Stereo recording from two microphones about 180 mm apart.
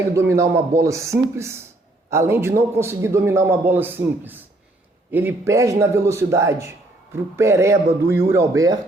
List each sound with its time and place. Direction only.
0.1 s a man's voice: 15° right (ahead or behind)